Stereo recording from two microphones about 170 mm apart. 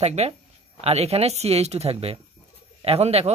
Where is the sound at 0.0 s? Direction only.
40° right (ahead or behind).